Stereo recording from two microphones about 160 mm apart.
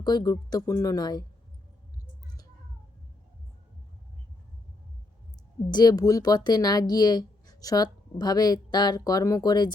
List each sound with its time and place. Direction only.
0.0 s speech: 25° left (ahead or behind)
5.7 s speech: 25° left (ahead or behind)